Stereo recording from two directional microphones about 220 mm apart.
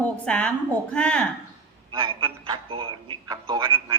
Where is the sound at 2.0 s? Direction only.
25° right (ahead or behind).